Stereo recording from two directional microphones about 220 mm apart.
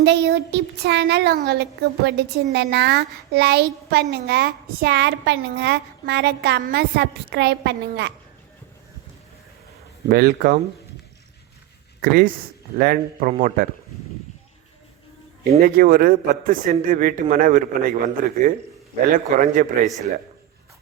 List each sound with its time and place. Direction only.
0.0 s speech: 50° right (ahead or behind)
10.1 s speech: 45° right (ahead or behind)
12.8 s a man's voice: 40° right (ahead or behind)
15.6 s a man's voice: 40° right (ahead or behind)